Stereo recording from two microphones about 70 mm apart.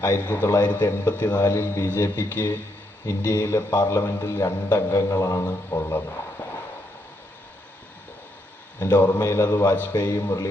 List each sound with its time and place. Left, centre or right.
0.3 s a man's voice: left
8.8 s a man's voice: left